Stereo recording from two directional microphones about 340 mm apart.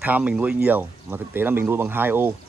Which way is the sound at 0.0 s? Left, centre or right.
Centre.